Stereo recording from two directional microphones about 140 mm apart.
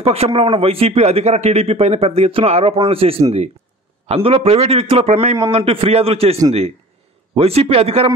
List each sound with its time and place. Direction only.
0.0 s a man's voice: 45° right (ahead or behind)
7.3 s a man's voice: 45° right (ahead or behind)